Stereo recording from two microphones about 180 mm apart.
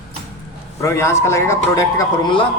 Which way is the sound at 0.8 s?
15° left (ahead or behind).